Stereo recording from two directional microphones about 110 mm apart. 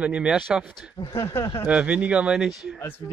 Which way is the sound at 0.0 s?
10° right (ahead or behind).